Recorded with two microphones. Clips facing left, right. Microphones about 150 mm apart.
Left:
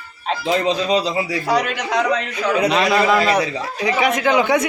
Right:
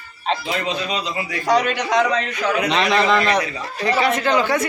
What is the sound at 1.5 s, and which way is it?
A man's voice, 5° left (ahead or behind).